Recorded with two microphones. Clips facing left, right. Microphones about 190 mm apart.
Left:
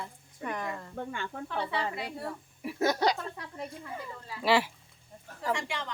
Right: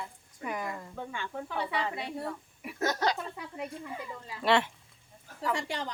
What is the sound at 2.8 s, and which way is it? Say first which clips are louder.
Speech: left 3 dB; 15° left (ahead or behind).